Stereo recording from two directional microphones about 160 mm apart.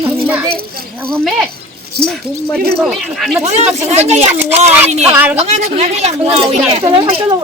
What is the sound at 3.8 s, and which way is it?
Speech, 45° right (ahead or behind).